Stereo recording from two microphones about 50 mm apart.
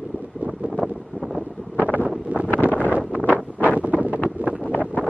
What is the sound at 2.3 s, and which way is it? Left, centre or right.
Wind noise, right.